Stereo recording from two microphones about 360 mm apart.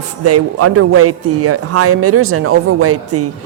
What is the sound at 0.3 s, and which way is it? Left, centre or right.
A woman's voice, right.